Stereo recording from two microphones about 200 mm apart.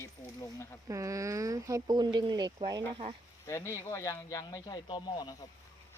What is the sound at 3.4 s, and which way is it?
Speech, 15° left (ahead or behind).